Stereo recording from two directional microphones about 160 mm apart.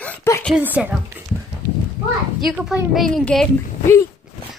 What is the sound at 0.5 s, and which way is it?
Speech, 10° right (ahead or behind).